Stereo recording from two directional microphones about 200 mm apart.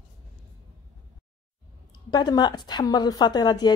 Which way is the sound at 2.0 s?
20° left (ahead or behind).